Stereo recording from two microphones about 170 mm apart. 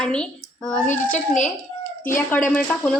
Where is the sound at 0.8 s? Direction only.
50° left (ahead or behind).